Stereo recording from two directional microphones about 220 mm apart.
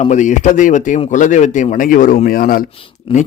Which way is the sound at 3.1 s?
25° left (ahead or behind).